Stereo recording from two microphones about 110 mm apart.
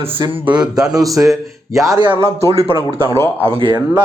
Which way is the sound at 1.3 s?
Centre (ahead or behind).